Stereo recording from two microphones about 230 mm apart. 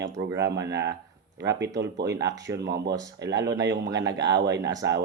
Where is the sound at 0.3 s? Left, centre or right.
Right.